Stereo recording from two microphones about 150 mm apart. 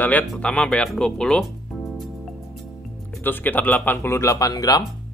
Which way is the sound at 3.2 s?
15° left (ahead or behind).